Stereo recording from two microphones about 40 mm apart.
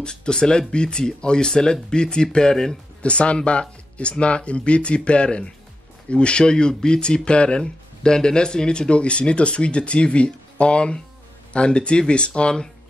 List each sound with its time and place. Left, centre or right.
0.0 s speech: left
3.0 s speech: left